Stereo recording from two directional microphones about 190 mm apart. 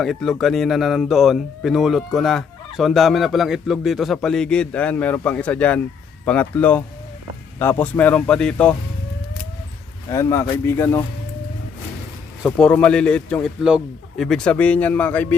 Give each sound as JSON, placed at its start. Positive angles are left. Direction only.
{"t": 0.0, "sound": "speech", "side_deg": 0}
{"t": 10.1, "sound": "speech", "side_deg": 15}
{"t": 12.5, "sound": "speech", "side_deg": 5}